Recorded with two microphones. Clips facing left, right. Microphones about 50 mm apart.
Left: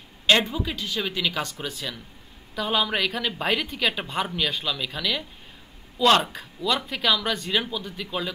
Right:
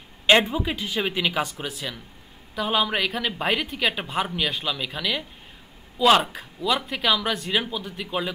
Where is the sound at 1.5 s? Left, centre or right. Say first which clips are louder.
Right 1 dB; centre.